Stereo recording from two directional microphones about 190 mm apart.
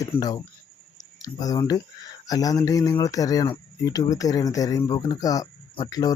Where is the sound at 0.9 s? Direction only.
20° left (ahead or behind).